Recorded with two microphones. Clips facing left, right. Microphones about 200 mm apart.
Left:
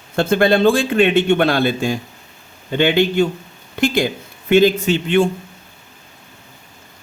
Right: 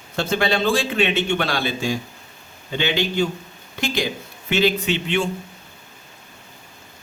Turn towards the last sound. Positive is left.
turn(degrees=50)  # may be behind; listen again after turning